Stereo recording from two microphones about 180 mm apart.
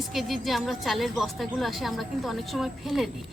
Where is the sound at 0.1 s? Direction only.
Centre (ahead or behind).